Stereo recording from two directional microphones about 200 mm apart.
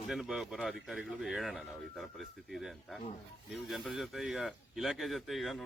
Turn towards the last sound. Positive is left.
turn(degrees=0)  # may be behind; listen again after turning